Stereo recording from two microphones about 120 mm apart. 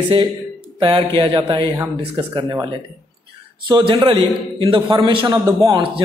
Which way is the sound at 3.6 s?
35° right (ahead or behind).